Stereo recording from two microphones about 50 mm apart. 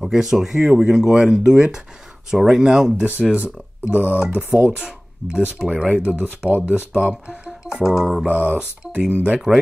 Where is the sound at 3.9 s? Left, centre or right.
Right.